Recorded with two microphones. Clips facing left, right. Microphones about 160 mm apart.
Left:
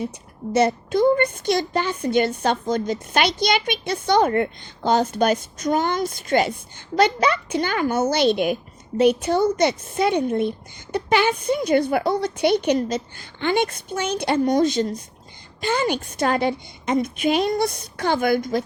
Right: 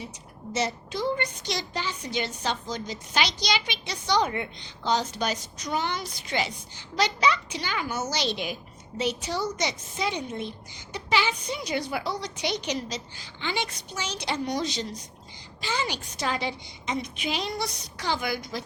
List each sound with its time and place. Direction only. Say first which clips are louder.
0.5 s a woman's voice: left 11 dB; 55° left (ahead or behind)